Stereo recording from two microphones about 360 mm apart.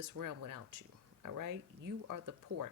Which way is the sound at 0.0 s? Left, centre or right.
Right.